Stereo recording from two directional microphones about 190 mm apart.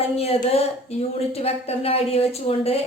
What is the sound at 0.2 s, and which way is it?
A woman's voice, 30° left (ahead or behind).